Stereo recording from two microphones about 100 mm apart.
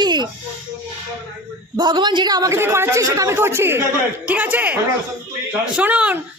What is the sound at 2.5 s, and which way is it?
A woman's voice, 25° right (ahead or behind).